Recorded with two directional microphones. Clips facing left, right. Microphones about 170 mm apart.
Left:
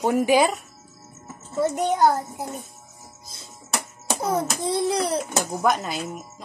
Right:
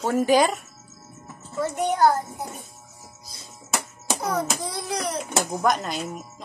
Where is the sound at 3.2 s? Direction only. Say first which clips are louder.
Left 1 dB; 25° left (ahead or behind).